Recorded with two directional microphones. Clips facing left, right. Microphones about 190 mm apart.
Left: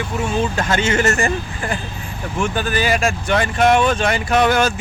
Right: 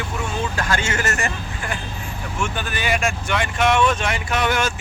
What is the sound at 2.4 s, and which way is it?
Speech, 35° left (ahead or behind).